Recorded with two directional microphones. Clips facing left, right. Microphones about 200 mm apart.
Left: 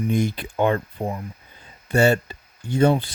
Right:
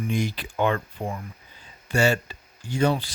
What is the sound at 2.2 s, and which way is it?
Speech, 55° left (ahead or behind).